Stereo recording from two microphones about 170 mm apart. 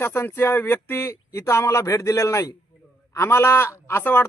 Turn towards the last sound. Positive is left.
turn(degrees=15)  # may be behind; listen again after turning